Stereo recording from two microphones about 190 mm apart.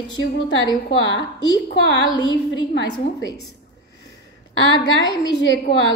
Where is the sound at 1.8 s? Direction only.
70° left (ahead or behind).